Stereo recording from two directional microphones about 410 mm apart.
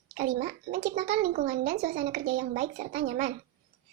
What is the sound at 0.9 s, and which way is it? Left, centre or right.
A child's voice, centre.